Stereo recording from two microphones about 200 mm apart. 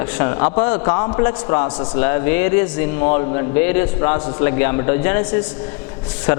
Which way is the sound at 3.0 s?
25° left (ahead or behind).